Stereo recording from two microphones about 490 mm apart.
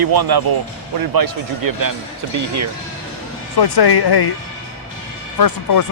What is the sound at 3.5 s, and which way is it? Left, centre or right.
Speech, left.